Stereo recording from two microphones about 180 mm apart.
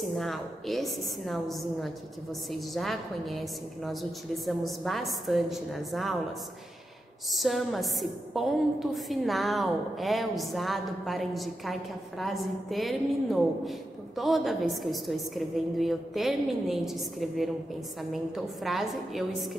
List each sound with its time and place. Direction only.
0.0 s a woman's voice: centre (ahead or behind)
7.3 s a woman's voice: centre (ahead or behind)